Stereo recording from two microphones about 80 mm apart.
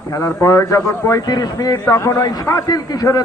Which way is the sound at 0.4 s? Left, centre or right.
Left.